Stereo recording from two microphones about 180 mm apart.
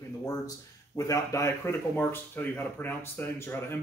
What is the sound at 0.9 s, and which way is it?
A man's voice, 20° left (ahead or behind).